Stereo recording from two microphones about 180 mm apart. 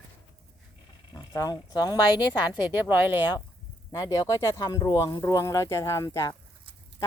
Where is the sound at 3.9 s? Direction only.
20° left (ahead or behind).